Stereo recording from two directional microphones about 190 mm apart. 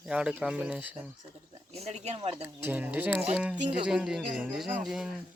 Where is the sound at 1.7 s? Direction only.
35° right (ahead or behind).